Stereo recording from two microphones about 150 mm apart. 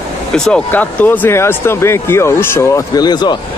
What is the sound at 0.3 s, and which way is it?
Speech, 10° left (ahead or behind).